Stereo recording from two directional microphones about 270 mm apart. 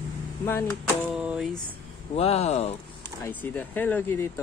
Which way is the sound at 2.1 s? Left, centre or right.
Left.